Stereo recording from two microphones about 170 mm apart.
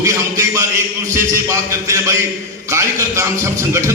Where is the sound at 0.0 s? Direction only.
20° right (ahead or behind).